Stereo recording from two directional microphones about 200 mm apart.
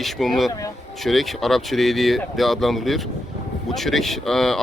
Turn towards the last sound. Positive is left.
turn(degrees=0)  # may be behind; listen again after turning